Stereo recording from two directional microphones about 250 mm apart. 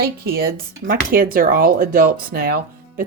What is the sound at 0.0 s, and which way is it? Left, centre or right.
Speech, right.